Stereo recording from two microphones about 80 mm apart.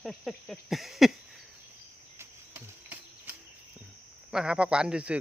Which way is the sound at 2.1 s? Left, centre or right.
Right.